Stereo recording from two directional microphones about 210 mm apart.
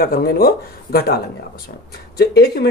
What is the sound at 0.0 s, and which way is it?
Speech, 45° left (ahead or behind).